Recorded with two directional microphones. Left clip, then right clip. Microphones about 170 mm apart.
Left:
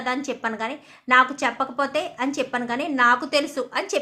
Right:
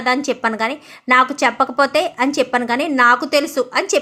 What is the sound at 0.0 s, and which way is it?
A woman's voice, 30° right (ahead or behind).